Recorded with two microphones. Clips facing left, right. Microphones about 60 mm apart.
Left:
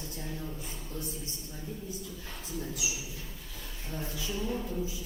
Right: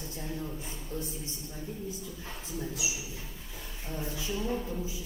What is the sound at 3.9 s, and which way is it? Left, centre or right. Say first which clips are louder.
A woman's voice: right 1 dB; right.